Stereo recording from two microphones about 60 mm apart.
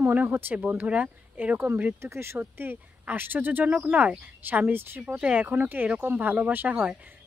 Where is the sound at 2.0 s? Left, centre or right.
Right.